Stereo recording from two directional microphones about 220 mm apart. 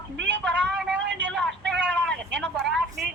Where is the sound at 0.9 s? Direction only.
55° right (ahead or behind).